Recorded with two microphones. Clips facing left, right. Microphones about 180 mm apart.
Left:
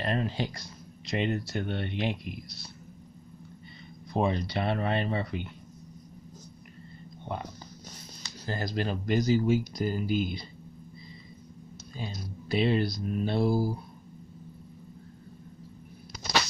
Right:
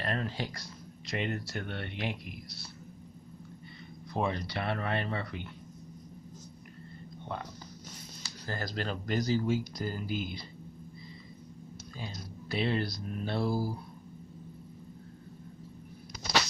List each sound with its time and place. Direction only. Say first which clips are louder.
0.0 s speech: left 4 dB; 20° left (ahead or behind)
4.1 s speech: left 4 dB; 20° left (ahead or behind)
8.5 s speech: left 4 dB; 20° left (ahead or behind)
12.0 s speech: left 5 dB; 20° left (ahead or behind)